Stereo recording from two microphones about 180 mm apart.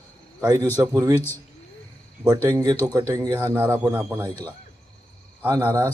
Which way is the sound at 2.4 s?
20° right (ahead or behind).